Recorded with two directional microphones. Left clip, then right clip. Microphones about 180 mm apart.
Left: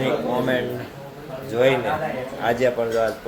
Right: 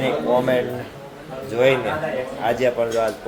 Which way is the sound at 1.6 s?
Centre (ahead or behind).